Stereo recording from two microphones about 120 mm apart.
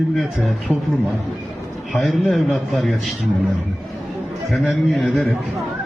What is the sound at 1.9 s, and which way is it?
A man's voice, centre (ahead or behind).